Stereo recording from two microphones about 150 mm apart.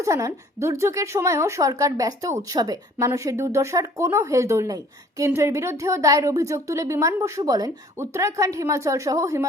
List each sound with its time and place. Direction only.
0.0 s a woman's voice: 20° right (ahead or behind)